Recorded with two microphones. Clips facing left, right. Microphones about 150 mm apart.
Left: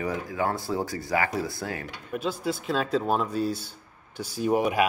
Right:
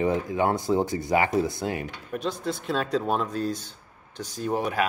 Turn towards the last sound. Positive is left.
turn(degrees=10)  # may be behind; listen again after turning